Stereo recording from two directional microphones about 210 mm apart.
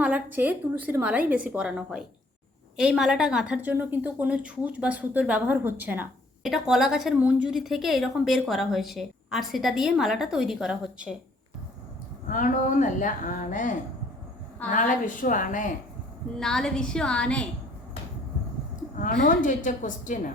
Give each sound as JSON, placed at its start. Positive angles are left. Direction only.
{"t": 0.0, "sound": "a woman's voice", "side_deg": -10}
{"t": 12.3, "sound": "a woman's voice", "side_deg": 40}
{"t": 16.4, "sound": "a woman's voice", "side_deg": 5}
{"t": 18.9, "sound": "a woman's voice", "side_deg": 40}